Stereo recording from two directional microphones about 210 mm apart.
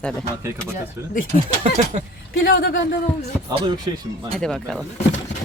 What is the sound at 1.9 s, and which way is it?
Speech, 30° right (ahead or behind).